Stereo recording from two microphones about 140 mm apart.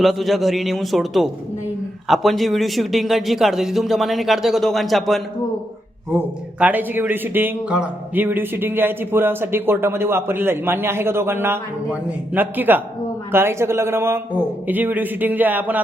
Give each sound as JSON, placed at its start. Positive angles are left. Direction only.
{"t": 0.0, "sound": "a man's voice", "side_deg": 0}
{"t": 6.1, "sound": "speech", "side_deg": -10}